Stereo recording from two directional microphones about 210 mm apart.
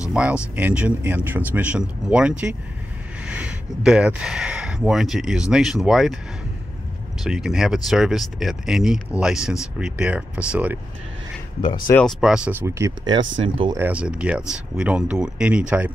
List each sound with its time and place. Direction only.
0.1 s speech: 5° right (ahead or behind)
7.2 s speech: centre (ahead or behind)
11.9 s speech: centre (ahead or behind); by 13.7 s 25° right (ahead or behind)
13.7 s speech: 5° right (ahead or behind)